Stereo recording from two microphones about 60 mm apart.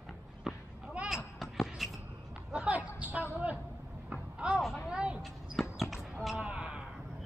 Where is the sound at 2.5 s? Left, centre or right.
Right.